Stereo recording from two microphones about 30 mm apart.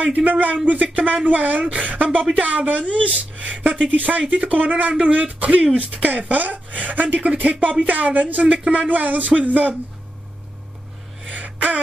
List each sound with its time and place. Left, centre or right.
0.1 s speech: right
0.8 s speech: right
2.8 s speech: left
3.2 s speech: right
3.9 s speech: right
8.9 s speech: right
11.3 s a sound: right